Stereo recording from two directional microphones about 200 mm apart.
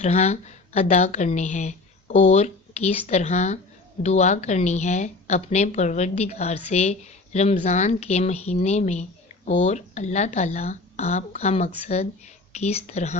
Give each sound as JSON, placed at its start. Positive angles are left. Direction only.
{"t": 0.0, "sound": "speech", "side_deg": 35}